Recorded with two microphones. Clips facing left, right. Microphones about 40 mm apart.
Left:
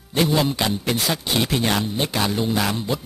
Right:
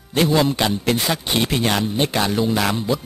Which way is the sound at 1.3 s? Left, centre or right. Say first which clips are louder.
Right 1 dB; centre.